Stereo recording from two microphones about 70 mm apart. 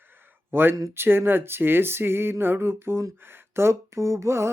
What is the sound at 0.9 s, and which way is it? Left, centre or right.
Mantra, right.